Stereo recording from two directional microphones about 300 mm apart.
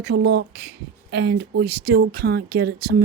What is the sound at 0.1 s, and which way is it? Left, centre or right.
Speech, right.